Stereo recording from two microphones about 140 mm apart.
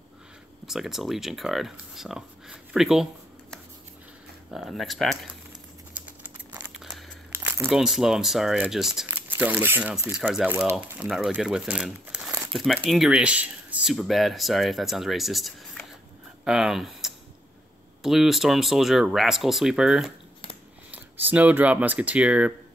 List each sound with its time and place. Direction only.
0.7 s speech: centre (ahead or behind)
6.0 s crumpling: 10° right (ahead or behind)
7.3 s crumpling: 15° right (ahead or behind)
7.7 s speech: centre (ahead or behind)
9.0 s speech: 15° right (ahead or behind)
11.1 s speech: centre (ahead or behind)